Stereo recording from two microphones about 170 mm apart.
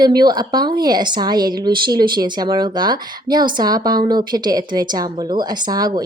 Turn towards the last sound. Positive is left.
turn(degrees=-25)  # may be behind; listen again after turning